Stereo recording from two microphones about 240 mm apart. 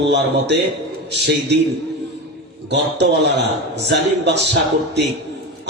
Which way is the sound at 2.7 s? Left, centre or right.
Right.